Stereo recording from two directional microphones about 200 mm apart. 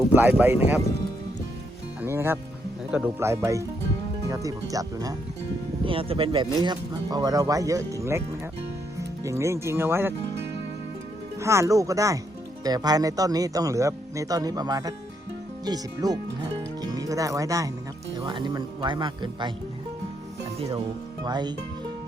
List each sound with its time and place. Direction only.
0.0 s speech: 10° right (ahead or behind)
2.0 s speech: 10° right (ahead or behind)
11.3 s speech: 15° right (ahead or behind)
21.2 s speech: 20° right (ahead or behind)